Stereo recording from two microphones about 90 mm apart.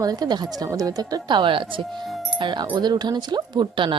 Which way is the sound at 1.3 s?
65° right (ahead or behind).